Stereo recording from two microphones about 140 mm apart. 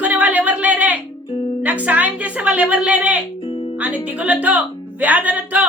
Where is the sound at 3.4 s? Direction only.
45° left (ahead or behind).